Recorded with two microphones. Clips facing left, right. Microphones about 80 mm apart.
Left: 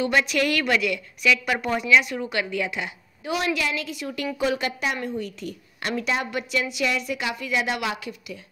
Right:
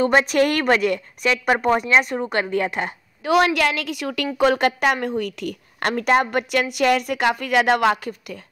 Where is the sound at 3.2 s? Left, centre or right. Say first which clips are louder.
Right 8 dB; right.